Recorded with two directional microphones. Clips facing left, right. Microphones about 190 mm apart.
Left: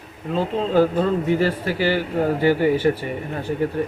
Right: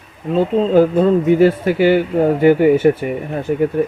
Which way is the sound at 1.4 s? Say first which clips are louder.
Right 8 dB; 20° right (ahead or behind).